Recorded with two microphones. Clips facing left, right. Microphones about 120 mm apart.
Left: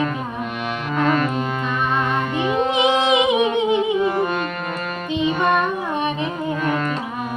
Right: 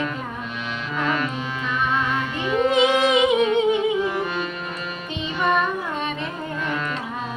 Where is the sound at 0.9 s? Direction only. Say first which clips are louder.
Left 5 dB; 45° left (ahead or behind).